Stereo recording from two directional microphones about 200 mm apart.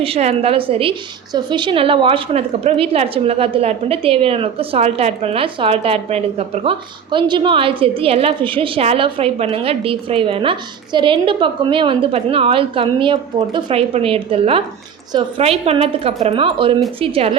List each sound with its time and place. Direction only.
0.0 s a woman's voice: 30° right (ahead or behind)